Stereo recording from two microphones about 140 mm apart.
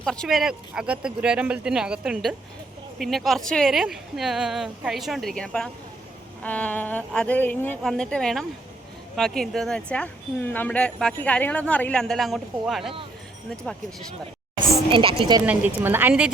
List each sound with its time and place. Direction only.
0.0 s speech: 5° left (ahead or behind)
14.8 s speech: 40° right (ahead or behind)
15.4 s a woman's voice: 15° right (ahead or behind)